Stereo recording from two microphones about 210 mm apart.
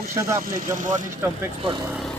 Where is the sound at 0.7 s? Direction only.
40° right (ahead or behind).